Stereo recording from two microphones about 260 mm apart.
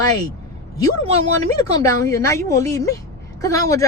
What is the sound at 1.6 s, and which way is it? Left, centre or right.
Speech, centre.